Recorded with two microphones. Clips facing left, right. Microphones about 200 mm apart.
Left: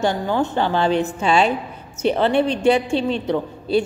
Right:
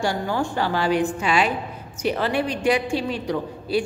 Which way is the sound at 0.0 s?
20° left (ahead or behind).